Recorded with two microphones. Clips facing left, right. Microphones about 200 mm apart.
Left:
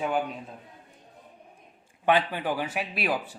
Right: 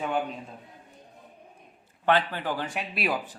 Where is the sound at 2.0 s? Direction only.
15° left (ahead or behind).